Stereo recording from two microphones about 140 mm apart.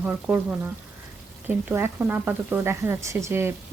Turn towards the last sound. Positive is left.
turn(degrees=-20)  # may be behind; listen again after turning